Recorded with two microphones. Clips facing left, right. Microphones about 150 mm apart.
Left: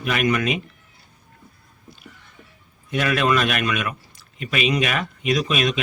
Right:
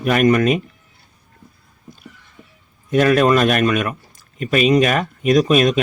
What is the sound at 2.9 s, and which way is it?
A man's voice, 40° right (ahead or behind).